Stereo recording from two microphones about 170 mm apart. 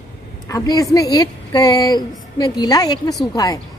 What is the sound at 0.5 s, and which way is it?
A woman's voice, 20° left (ahead or behind).